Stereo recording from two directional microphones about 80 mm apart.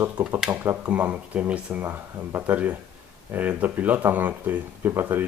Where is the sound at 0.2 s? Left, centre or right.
Right.